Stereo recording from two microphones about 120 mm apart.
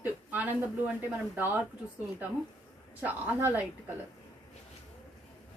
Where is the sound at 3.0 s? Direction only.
15° right (ahead or behind).